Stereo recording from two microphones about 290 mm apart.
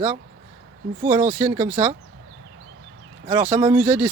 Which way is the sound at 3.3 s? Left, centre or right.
Centre.